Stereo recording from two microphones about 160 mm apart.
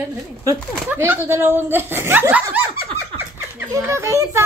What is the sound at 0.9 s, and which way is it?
Speech, 15° right (ahead or behind).